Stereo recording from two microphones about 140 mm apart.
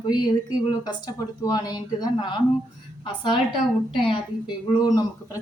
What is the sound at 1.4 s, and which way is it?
A woman's voice, 25° left (ahead or behind).